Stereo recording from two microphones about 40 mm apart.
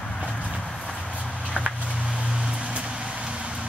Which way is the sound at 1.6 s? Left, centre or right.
Right.